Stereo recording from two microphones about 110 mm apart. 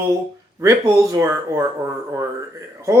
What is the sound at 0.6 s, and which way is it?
Speech, 30° right (ahead or behind).